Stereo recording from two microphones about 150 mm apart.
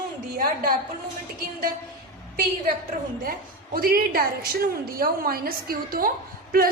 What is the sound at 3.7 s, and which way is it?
A woman's voice, 75° right (ahead or behind).